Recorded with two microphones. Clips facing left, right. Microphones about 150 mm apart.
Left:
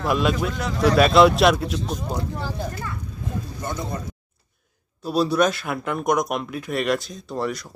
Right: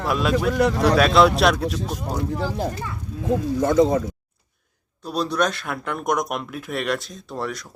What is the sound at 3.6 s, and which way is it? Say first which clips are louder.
Speech: right 13 dB; 90° right.